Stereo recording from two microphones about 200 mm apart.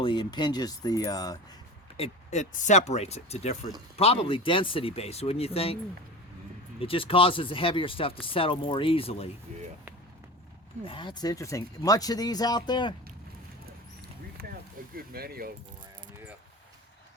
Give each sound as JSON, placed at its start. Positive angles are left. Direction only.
{"t": 0.0, "sound": "speech", "side_deg": 25}
{"t": 2.0, "sound": "speech", "side_deg": 35}
{"t": 6.7, "sound": "speech", "side_deg": 25}
{"t": 10.8, "sound": "speech", "side_deg": 25}
{"t": 14.4, "sound": "vehicle", "side_deg": -45}
{"t": 14.9, "sound": "speech", "side_deg": -50}